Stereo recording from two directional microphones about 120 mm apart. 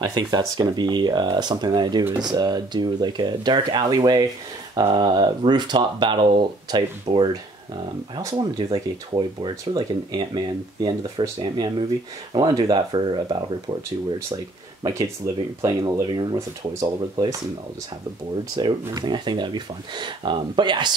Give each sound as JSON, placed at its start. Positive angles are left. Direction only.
{"t": 0.1, "sound": "speech", "side_deg": -35}
{"t": 14.3, "sound": "speech", "side_deg": -30}
{"t": 18.6, "sound": "speech", "side_deg": -35}